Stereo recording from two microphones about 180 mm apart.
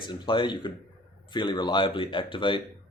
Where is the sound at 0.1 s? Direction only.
25° left (ahead or behind).